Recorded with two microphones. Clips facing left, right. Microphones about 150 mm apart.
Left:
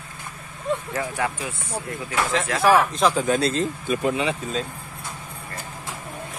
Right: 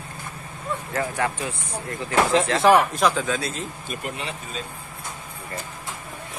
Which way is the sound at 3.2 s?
50° left (ahead or behind).